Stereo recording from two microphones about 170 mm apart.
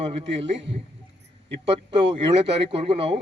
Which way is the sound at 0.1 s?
35° right (ahead or behind).